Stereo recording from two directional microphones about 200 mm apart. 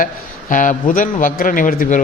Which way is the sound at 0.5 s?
40° left (ahead or behind).